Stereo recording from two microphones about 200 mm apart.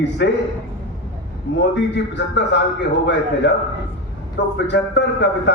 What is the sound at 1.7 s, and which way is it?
A man's voice, 60° left (ahead or behind).